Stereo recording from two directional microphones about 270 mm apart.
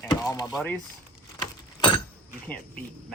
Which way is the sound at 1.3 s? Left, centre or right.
Centre.